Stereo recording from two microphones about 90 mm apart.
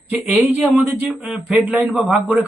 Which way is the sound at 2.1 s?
15° right (ahead or behind).